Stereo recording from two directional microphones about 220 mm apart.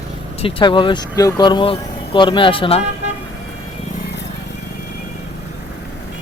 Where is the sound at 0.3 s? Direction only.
25° left (ahead or behind).